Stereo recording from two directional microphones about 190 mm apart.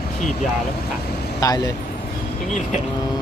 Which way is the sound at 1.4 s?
20° left (ahead or behind).